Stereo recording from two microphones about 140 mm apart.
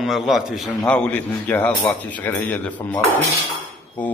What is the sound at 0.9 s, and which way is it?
Speech, 10° left (ahead or behind).